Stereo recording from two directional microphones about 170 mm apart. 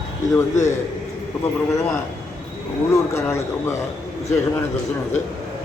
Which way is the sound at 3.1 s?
15° left (ahead or behind).